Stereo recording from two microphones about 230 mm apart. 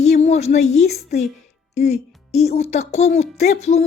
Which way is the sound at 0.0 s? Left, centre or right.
Left.